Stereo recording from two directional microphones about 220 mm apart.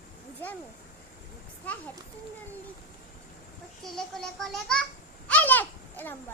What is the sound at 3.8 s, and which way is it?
Speech, centre (ahead or behind).